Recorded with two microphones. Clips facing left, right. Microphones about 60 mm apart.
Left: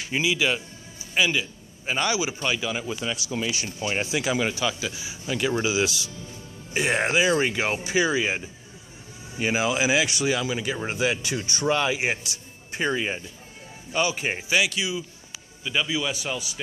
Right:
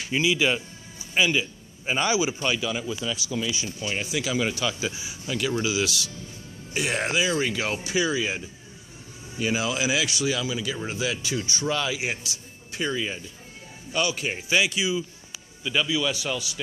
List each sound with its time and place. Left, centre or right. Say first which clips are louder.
0.1 s a man's voice: right 1 dB; centre
1.1 s a man's voice: right 1 dB; centre
2.2 s a man's voice: right 1 dB; centre
2.9 s speech: even; left
3.6 s a man's voice: left 2 dB; left
4.4 s a man's voice: left 1 dB; centre
4.7 s speech: right 1 dB; centre
5.2 s a man's voice: left 2 dB; centre; by 13.2 s left
13.9 s a man's voice: left 1 dB; centre
14.7 s speech: right 2 dB; centre
15.6 s a man's voice: right 1 dB; centre
15.9 s a man's voice: right 1 dB; left